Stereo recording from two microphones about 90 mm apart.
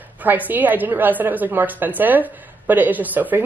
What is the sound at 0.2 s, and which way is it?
A woman's voice, 20° right (ahead or behind).